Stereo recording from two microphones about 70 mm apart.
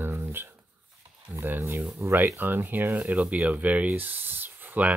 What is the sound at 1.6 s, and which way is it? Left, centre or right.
Speech, right.